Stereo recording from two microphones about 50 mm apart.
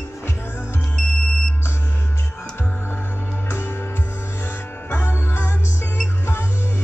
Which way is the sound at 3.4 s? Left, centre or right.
Left.